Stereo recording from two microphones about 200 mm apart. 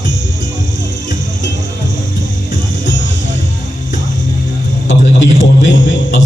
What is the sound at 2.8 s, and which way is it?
Music, 65° left (ahead or behind).